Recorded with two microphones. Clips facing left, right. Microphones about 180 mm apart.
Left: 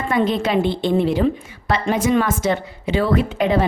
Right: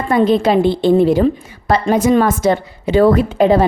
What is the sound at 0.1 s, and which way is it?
A woman's voice, 35° right (ahead or behind).